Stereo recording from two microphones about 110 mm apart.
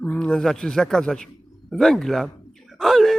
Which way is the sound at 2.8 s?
Centre (ahead or behind).